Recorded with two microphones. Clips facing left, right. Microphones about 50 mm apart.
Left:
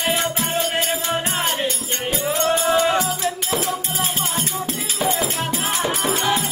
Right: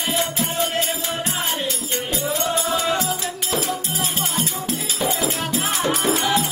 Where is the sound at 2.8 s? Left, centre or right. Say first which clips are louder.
Left 3 dB; left.